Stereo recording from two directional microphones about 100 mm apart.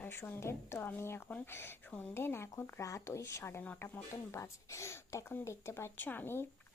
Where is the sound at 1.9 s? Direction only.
10° left (ahead or behind).